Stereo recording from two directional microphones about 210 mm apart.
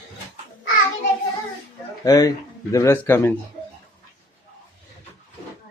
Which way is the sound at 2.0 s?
20° left (ahead or behind).